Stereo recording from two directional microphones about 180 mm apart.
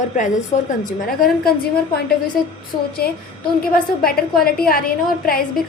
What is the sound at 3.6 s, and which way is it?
A woman's voice, 55° left (ahead or behind).